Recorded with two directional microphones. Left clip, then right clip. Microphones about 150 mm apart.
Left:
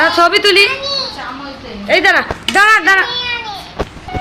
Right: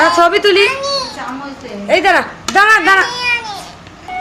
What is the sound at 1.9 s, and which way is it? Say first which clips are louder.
Speech: even; 5° right (ahead or behind).